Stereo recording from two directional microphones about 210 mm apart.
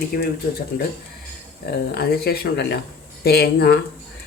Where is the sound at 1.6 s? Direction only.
50° left (ahead or behind).